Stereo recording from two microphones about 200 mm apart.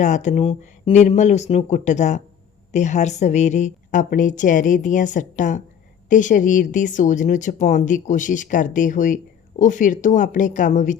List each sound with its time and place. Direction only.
0.0 s speech: 35° left (ahead or behind)